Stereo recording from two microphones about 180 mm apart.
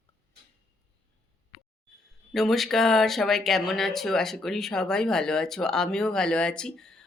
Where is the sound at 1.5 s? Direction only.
55° left (ahead or behind).